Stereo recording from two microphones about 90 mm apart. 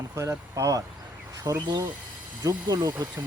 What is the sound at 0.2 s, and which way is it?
Speech, 35° right (ahead or behind).